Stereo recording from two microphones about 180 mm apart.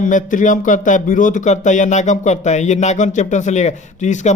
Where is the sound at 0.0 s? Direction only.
45° left (ahead or behind).